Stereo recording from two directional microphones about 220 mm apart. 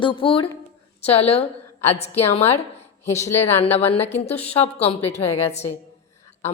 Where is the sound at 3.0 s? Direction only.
10° left (ahead or behind).